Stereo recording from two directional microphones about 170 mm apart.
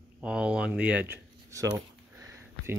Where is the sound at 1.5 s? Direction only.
20° right (ahead or behind).